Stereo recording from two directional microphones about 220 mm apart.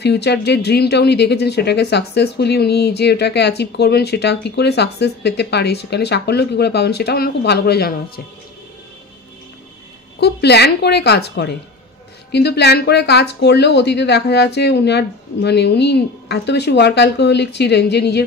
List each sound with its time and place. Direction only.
0.0 s speech: 50° left (ahead or behind)
10.2 s speech: 50° left (ahead or behind)